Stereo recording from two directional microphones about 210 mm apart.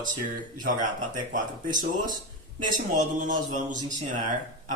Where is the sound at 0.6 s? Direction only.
40° right (ahead or behind).